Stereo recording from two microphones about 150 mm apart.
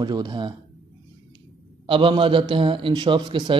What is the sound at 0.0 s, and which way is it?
Speech, 30° right (ahead or behind).